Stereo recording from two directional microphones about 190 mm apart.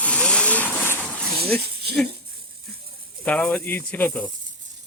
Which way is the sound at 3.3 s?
10° left (ahead or behind).